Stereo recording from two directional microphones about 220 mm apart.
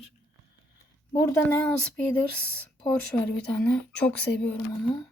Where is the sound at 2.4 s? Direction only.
5° left (ahead or behind).